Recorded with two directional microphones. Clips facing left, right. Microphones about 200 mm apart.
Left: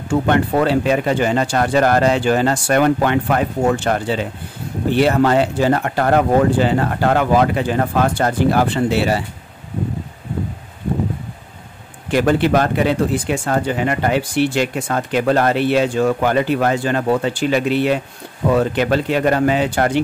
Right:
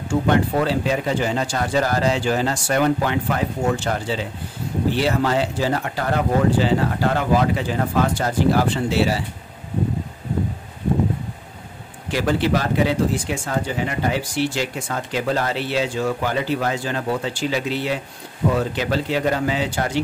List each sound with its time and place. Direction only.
0.1 s speech: 60° left (ahead or behind)
12.1 s speech: 55° left (ahead or behind)